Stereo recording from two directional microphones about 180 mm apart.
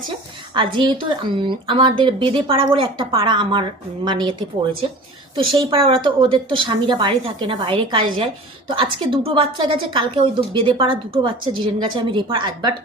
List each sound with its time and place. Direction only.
0.5 s a woman's voice: 30° right (ahead or behind)